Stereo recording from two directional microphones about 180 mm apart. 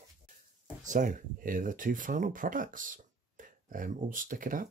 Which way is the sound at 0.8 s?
45° right (ahead or behind).